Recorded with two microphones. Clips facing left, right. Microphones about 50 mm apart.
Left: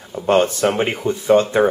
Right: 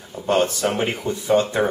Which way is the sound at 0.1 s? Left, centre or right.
Left.